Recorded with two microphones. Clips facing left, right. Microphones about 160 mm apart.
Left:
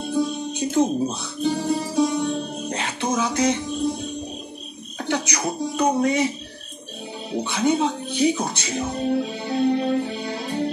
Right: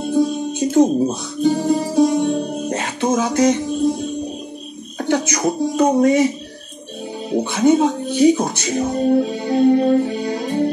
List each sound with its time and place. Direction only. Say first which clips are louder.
0.1 s music: right 6 dB; 50° right (ahead or behind)
4.9 s speech: right 6 dB; 45° right (ahead or behind)
7.3 s speech: right 7 dB; 45° right (ahead or behind)